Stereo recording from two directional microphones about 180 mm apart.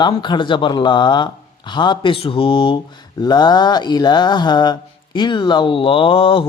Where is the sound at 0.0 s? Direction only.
25° left (ahead or behind).